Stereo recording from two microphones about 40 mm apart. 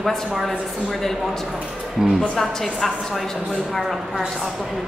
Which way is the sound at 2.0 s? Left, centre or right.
Centre.